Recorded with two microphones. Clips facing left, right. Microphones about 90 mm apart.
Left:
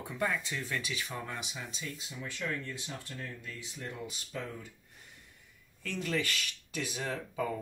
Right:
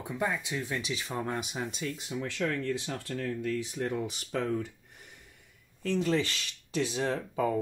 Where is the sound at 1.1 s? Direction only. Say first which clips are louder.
Right 7 dB; 40° right (ahead or behind); by 4.7 s 75° right (ahead or behind).